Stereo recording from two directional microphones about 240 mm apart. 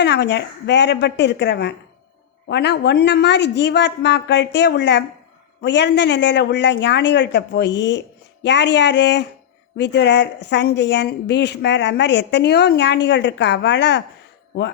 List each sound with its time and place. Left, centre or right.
0.0 s a woman's voice: left